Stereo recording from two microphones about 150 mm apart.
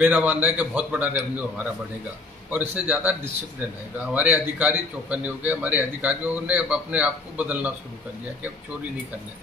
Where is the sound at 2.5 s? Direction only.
10° right (ahead or behind).